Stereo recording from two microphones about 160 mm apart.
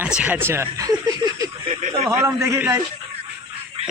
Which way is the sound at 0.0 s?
10° right (ahead or behind).